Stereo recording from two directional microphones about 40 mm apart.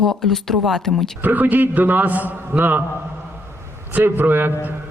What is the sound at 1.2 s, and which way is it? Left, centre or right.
A man's voice, right.